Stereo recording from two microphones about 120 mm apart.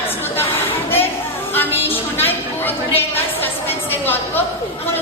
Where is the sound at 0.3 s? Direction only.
20° left (ahead or behind).